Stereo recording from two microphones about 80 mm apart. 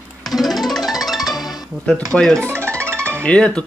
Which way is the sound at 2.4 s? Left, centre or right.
Right.